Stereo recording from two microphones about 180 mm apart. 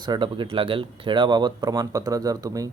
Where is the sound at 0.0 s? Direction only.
25° right (ahead or behind).